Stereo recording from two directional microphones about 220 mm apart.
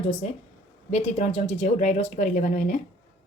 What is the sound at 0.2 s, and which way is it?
A woman's voice, 30° left (ahead or behind).